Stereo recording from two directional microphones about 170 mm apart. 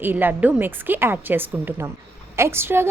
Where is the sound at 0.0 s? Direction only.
10° right (ahead or behind).